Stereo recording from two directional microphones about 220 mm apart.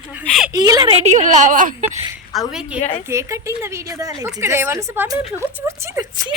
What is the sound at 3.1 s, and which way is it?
A woman's voice, 15° right (ahead or behind).